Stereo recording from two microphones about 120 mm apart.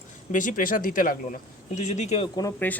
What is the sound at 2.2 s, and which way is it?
Speech, 35° left (ahead or behind).